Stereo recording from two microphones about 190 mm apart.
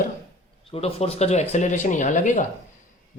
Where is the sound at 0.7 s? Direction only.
30° left (ahead or behind).